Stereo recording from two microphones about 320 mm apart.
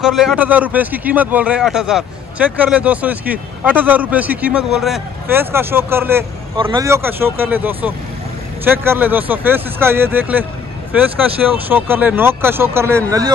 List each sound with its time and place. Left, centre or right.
0.0 s speech: centre